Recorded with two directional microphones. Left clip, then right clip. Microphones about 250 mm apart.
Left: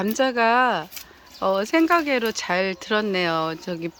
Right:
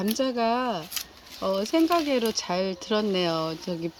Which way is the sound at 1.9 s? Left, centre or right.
Centre.